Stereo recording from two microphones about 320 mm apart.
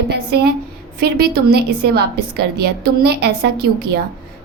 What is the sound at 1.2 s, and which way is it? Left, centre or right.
Speech, right.